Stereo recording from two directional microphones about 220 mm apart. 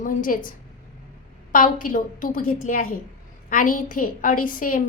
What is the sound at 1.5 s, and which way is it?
A woman's voice, 35° left (ahead or behind).